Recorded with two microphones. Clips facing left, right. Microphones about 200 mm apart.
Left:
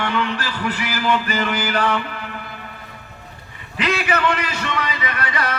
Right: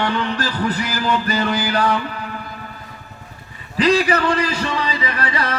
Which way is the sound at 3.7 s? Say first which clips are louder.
Right 5 dB; 35° right (ahead or behind).